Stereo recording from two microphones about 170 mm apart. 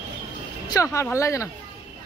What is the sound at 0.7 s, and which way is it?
Speech, 15° left (ahead or behind).